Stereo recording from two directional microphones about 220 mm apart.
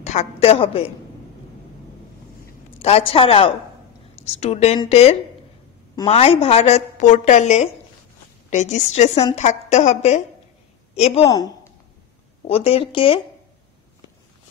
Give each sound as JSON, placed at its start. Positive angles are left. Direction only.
{"t": 0.0, "sound": "a woman's voice", "side_deg": 30}
{"t": 2.8, "sound": "a woman's voice", "side_deg": 25}
{"t": 11.2, "sound": "a woman's voice", "side_deg": 15}